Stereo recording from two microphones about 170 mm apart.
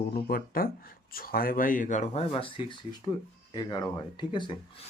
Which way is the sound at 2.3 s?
30° left (ahead or behind).